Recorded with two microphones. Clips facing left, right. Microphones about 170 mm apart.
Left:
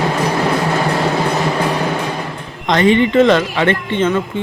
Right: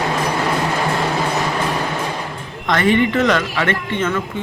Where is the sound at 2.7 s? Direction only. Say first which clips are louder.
Left 5 dB; 20° left (ahead or behind).